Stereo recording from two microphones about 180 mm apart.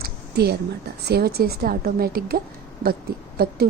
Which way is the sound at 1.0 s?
60° right (ahead or behind).